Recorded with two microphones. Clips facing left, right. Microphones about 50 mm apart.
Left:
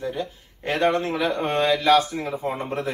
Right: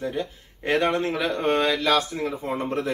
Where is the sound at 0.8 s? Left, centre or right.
Centre.